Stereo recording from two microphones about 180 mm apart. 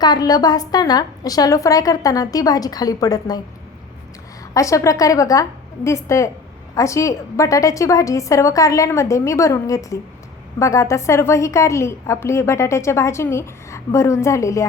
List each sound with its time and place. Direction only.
0.0 s a woman's voice: 20° left (ahead or behind)
4.5 s a woman's voice: 15° left (ahead or behind)